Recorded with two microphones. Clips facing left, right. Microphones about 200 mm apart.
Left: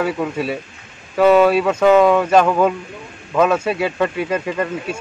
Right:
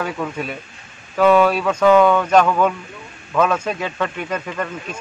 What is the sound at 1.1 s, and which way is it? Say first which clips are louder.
Speech: left 2 dB; 25° left (ahead or behind).